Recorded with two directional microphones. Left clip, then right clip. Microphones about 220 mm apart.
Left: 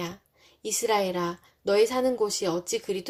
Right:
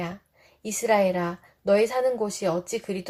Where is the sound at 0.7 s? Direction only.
30° left (ahead or behind).